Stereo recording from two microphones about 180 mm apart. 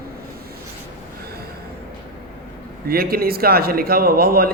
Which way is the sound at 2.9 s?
55° right (ahead or behind).